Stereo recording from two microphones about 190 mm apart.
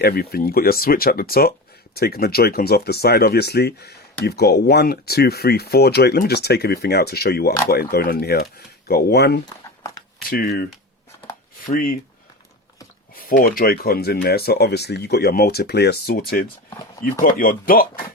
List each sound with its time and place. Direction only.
0.0 s speech: 55° left (ahead or behind)
11.7 s speech: 50° left (ahead or behind)
13.1 s speech: 50° left (ahead or behind)